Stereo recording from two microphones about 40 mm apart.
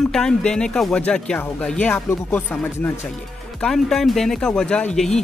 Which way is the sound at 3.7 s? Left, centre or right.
Centre.